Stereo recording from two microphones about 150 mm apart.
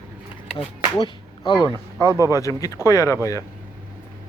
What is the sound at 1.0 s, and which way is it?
A man's voice, 30° left (ahead or behind).